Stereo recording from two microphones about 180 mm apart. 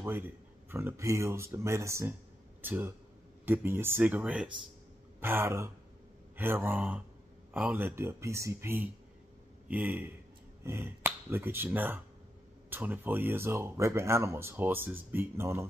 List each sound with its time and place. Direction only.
0.7 s speech: 15° right (ahead or behind)